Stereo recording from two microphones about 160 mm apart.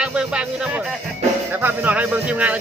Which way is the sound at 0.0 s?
5° right (ahead or behind).